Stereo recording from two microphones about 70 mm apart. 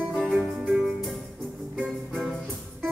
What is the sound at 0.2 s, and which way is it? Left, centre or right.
Music, centre.